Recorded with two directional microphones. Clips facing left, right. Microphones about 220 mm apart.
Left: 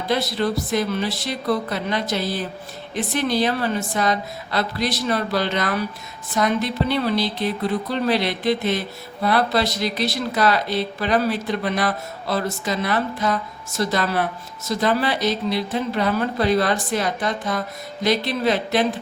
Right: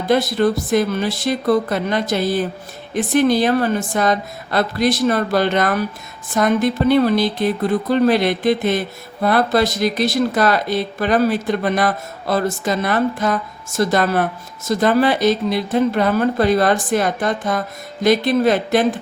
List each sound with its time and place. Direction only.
0.1 s speech: 50° right (ahead or behind)